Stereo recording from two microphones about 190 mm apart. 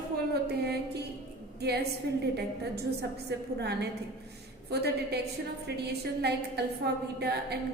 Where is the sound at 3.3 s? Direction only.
60° right (ahead or behind).